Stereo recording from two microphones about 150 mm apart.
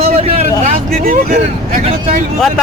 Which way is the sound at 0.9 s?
70° right (ahead or behind).